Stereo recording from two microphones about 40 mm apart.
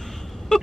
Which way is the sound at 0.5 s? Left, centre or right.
Centre.